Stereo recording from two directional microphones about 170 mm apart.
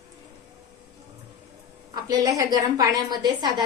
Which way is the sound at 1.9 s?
25° right (ahead or behind).